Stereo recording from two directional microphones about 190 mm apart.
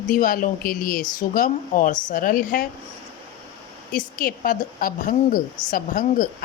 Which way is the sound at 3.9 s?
50° left (ahead or behind).